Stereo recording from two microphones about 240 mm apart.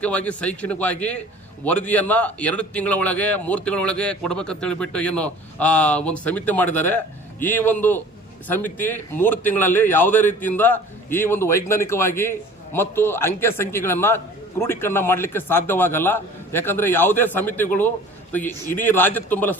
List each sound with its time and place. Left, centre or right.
0.0 s a man's voice: centre